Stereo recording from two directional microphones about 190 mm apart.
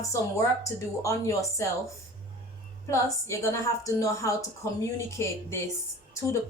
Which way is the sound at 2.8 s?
15° left (ahead or behind).